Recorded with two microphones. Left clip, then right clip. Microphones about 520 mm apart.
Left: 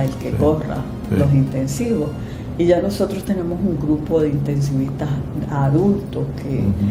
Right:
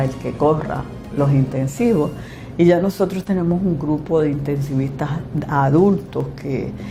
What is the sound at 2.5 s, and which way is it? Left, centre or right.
Speech, right.